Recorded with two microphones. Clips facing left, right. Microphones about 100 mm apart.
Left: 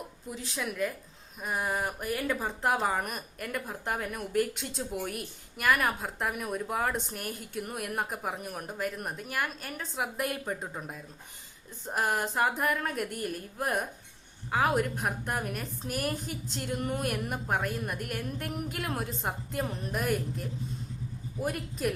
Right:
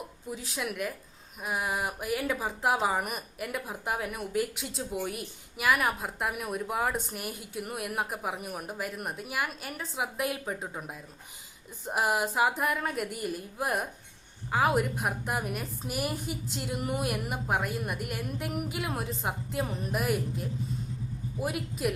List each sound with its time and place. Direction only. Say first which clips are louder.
0.3 s speech: left 2 dB; 5° right (ahead or behind)